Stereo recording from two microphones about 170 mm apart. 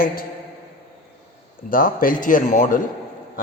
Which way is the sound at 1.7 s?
55° left (ahead or behind).